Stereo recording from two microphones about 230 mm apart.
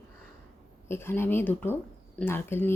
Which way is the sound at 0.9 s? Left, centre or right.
Centre.